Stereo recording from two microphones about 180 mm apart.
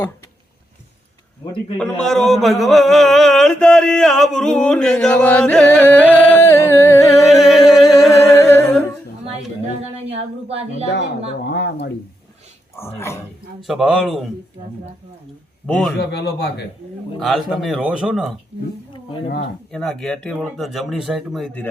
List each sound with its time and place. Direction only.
1.8 s a man's voice: 5° left (ahead or behind)
7.3 s singing: centre (ahead or behind)
8.2 s a sound: 15° left (ahead or behind)
9.8 s speech: 35° right (ahead or behind)
11.4 s speech: 75° left (ahead or behind)
13.0 s speech: 15° left (ahead or behind)
13.7 s a man's voice: centre (ahead or behind)
15.6 s a man's voice: 5° left (ahead or behind)
16.0 s speech: 65° left (ahead or behind)
17.2 s a man's voice: centre (ahead or behind)
19.7 s a man's voice: 5° left (ahead or behind)